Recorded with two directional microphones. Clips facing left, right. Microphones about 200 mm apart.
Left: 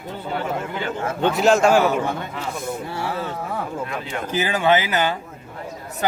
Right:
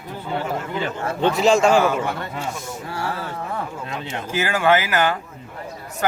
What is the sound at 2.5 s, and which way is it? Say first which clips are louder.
Speech: left 5 dB; 60° left (ahead or behind).